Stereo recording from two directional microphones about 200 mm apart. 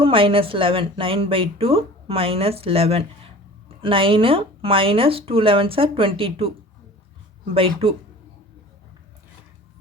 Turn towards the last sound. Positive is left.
turn(degrees=-30)  # may be behind; listen again after turning